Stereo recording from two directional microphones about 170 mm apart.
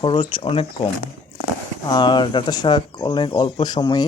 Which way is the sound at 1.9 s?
25° left (ahead or behind).